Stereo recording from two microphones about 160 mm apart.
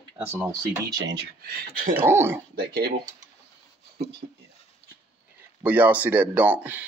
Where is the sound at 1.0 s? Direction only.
90° right.